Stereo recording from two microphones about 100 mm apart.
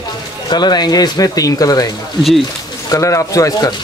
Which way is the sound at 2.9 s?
30° left (ahead or behind).